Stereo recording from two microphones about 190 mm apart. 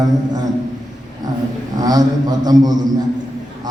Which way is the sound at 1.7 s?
20° right (ahead or behind).